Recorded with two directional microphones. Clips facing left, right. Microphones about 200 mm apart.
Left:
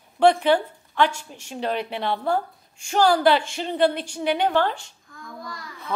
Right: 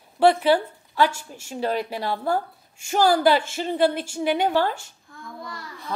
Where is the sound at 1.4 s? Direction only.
45° right (ahead or behind).